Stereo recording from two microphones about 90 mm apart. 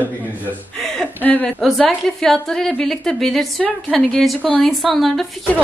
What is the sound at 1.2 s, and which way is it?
Speech, 20° left (ahead or behind).